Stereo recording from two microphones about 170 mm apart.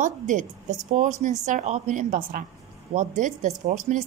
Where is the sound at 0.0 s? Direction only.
45° right (ahead or behind).